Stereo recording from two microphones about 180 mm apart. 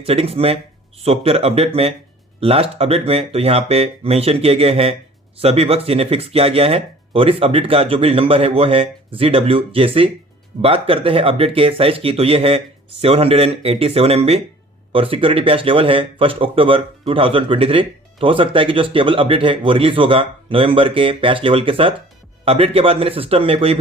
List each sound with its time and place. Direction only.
0.0 s speech: 30° right (ahead or behind)